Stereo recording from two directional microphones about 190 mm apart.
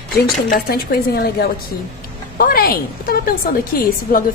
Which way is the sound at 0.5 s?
55° left (ahead or behind).